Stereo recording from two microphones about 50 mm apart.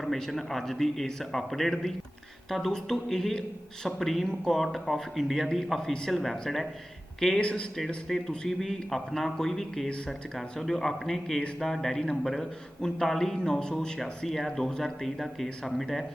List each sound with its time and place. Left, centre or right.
0.0 s a man's voice: centre
7.3 s speech: centre
8.1 s a man's voice: centre